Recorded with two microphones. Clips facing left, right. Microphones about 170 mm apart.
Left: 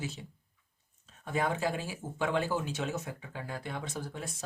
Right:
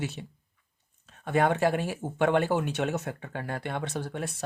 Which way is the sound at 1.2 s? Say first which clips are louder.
Right 7 dB; 70° right (ahead or behind).